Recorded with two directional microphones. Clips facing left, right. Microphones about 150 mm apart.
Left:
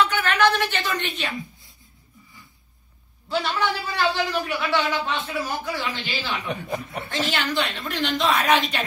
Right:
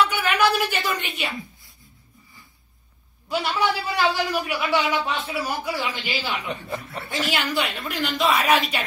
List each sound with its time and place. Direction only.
0.0 s a woman's voice: 10° right (ahead or behind)
3.3 s a man's voice: 10° right (ahead or behind)
6.5 s speech: 15° left (ahead or behind)
7.1 s a man's voice: 10° right (ahead or behind)